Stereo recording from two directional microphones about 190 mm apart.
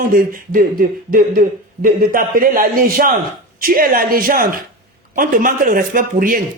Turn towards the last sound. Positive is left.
turn(degrees=-45)  # may be behind; listen again after turning